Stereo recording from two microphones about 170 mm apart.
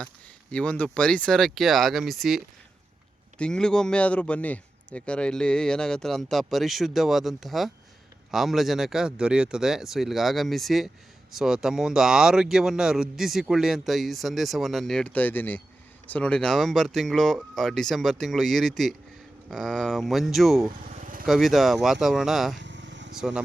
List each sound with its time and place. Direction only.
0.5 s speech: 5° left (ahead or behind)
22.5 s vehicle: 90° right